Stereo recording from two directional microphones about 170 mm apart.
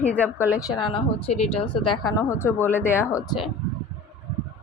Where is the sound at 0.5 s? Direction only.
25° left (ahead or behind).